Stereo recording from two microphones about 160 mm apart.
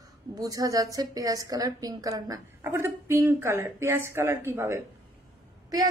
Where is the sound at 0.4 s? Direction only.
20° right (ahead or behind).